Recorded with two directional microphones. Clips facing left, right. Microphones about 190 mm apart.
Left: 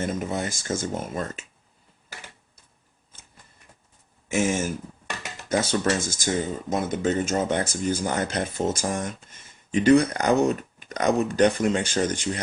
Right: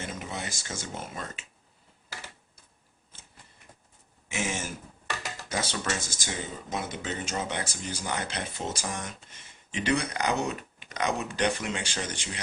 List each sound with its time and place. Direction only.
0.0 s speech: 50° left (ahead or behind)
4.3 s speech: 45° left (ahead or behind)